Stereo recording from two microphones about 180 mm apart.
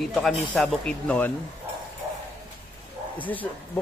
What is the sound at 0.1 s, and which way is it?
Speech, centre (ahead or behind).